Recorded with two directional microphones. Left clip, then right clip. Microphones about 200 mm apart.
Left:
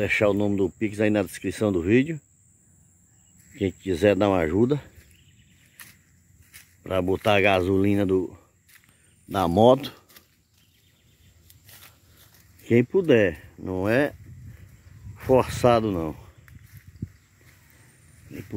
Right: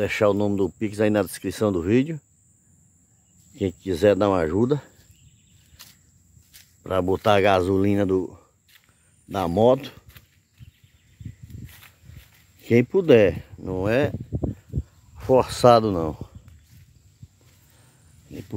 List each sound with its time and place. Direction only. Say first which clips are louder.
0.0 s speech: right 1 dB; 10° right (ahead or behind)
3.5 s speech: even; 10° right (ahead or behind)
6.5 s cricket: even; 5° right (ahead or behind)
6.9 s speech: right 2 dB; 15° right (ahead or behind); by 10.2 s 10° left (ahead or behind)
12.6 s speech: right 2 dB; 15° right (ahead or behind)
13.6 s speech: left 1 dB; centre (ahead or behind)
15.1 s a sound: right 1 dB; 5° left (ahead or behind)
15.6 s speech: right 5 dB; 15° right (ahead or behind)